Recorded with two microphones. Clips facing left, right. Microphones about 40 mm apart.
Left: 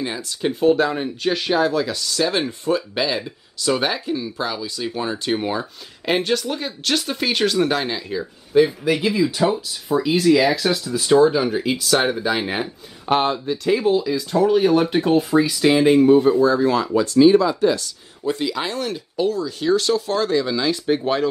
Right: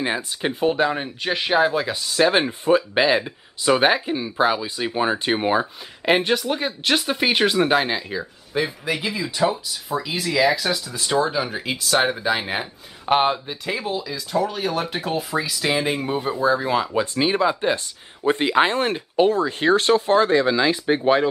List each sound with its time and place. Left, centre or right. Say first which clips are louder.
0.0 s speech: even; right
6.1 s speech: left 1 dB; centre
13.7 s speech: left 8 dB; centre